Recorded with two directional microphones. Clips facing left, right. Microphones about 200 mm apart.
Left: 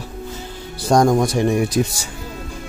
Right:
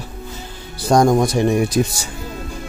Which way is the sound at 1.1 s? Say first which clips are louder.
Right 1 dB; 20° right (ahead or behind).